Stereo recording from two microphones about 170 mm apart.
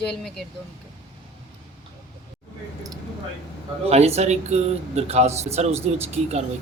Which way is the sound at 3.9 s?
40° right (ahead or behind).